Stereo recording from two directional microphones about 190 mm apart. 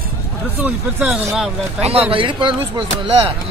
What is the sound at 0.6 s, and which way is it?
Speech, 10° right (ahead or behind).